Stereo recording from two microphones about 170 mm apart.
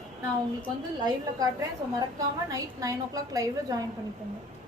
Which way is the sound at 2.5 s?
20° right (ahead or behind).